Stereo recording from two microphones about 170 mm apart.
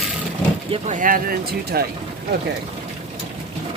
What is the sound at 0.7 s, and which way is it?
Speech, 45° right (ahead or behind).